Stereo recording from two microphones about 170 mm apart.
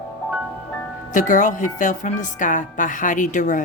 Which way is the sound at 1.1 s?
50° left (ahead or behind).